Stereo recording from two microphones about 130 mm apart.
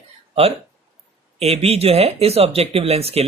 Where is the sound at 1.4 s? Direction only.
50° right (ahead or behind).